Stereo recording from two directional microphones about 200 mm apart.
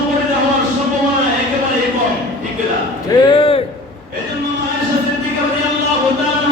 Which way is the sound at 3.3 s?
25° left (ahead or behind).